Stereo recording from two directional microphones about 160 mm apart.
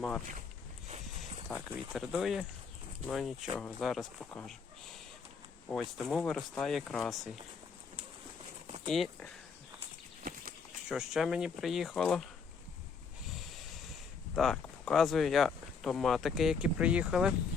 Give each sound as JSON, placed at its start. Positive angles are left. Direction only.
{"t": 1.5, "sound": "speech", "side_deg": 0}
{"t": 5.6, "sound": "speech", "side_deg": 0}
{"t": 8.6, "sound": "a sound", "side_deg": -40}
{"t": 8.9, "sound": "speech", "side_deg": 0}
{"t": 10.3, "sound": "bird flight", "side_deg": -65}
{"t": 10.8, "sound": "speech", "side_deg": -5}
{"t": 13.3, "sound": "a sound", "side_deg": 0}
{"t": 14.3, "sound": "speech", "side_deg": 5}